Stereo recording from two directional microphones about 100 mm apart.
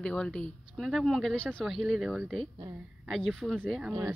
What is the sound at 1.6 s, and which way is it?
Speech, centre (ahead or behind).